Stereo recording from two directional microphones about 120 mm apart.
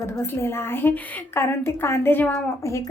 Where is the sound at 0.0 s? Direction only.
20° left (ahead or behind).